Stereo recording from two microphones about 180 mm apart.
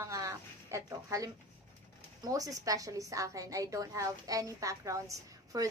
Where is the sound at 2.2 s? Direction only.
20° right (ahead or behind).